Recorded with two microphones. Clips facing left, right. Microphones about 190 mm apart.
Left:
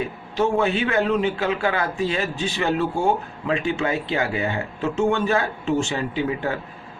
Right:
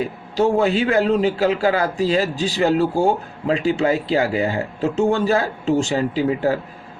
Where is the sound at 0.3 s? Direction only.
35° right (ahead or behind).